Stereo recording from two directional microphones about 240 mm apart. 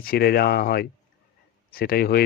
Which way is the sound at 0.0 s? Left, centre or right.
Left.